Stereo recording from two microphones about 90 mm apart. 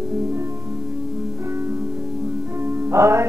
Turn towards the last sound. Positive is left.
turn(degrees=-30)  # may be behind; listen again after turning